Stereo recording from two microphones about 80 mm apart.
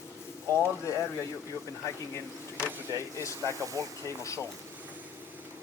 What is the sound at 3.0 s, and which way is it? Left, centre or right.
Speech, left.